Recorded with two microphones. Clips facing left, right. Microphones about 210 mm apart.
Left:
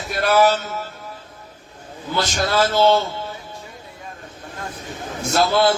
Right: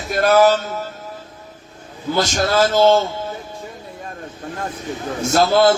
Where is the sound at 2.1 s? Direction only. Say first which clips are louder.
Right 3 dB; 45° right (ahead or behind).